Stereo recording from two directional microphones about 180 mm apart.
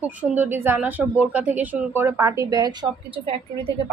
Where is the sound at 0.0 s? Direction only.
10° right (ahead or behind).